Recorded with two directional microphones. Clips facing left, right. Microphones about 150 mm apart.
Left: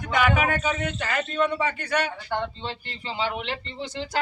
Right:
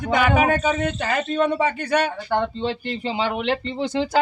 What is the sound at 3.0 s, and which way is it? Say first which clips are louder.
Speech: right 6 dB; 65° right (ahead or behind).